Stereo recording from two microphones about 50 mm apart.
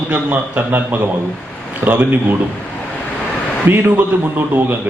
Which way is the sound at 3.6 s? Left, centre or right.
Right.